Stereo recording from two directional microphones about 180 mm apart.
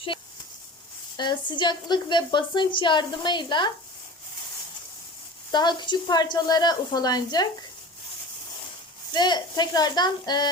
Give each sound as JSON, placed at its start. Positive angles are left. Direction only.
{"t": 1.1, "sound": "a woman's voice", "side_deg": 25}
{"t": 5.5, "sound": "a woman's voice", "side_deg": 25}
{"t": 9.1, "sound": "a woman's voice", "side_deg": 25}